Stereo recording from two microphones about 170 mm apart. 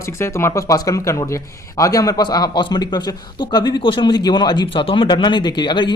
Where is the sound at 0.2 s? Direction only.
15° left (ahead or behind).